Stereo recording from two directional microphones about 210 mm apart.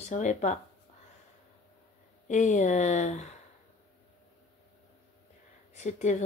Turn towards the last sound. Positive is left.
turn(degrees=35)  # may be behind; listen again after turning